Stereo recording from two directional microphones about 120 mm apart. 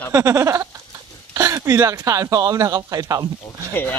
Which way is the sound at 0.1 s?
25° right (ahead or behind).